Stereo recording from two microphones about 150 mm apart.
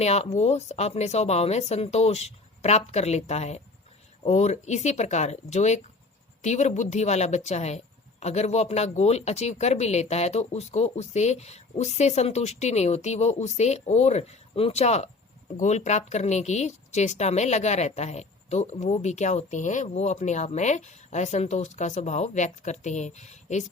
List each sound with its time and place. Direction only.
0.0 s speech: 45° left (ahead or behind)